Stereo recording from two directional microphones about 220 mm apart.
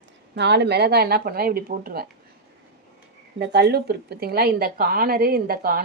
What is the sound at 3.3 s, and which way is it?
A woman's voice, 50° right (ahead or behind).